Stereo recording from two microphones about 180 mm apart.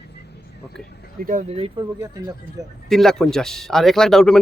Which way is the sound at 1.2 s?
55° right (ahead or behind).